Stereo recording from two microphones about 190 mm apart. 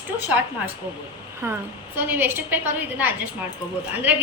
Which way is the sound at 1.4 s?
15° right (ahead or behind).